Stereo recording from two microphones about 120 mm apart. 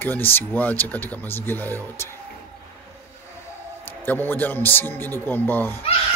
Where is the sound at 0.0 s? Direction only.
15° left (ahead or behind).